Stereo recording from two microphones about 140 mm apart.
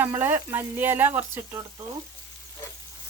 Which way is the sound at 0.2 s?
15° right (ahead or behind).